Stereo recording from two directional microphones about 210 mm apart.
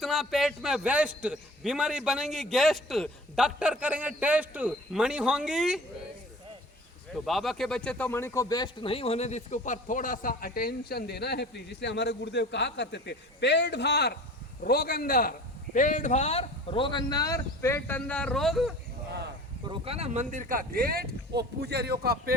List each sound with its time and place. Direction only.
0.0 s a man's voice: centre (ahead or behind)
7.1 s a man's voice: centre (ahead or behind)
19.6 s speech: 25° right (ahead or behind); by 22.4 s 45° right (ahead or behind)